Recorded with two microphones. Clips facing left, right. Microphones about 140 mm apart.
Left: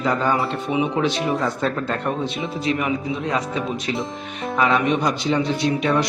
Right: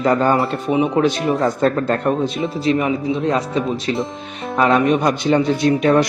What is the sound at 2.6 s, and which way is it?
Speech, 30° right (ahead or behind).